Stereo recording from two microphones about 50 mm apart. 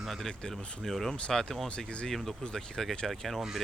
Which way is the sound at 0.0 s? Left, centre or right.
Centre.